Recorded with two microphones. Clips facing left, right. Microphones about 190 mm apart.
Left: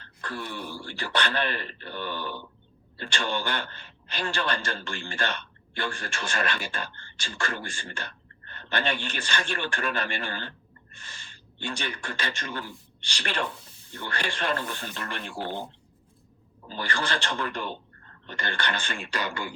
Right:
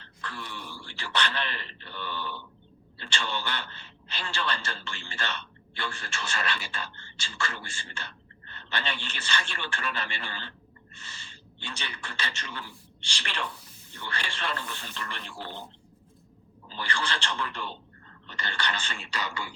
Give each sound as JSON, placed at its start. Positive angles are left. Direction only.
{"t": 0.0, "sound": "wail", "side_deg": 50}
{"t": 0.9, "sound": "a man's voice", "side_deg": 50}
{"t": 16.6, "sound": "a man's voice", "side_deg": 45}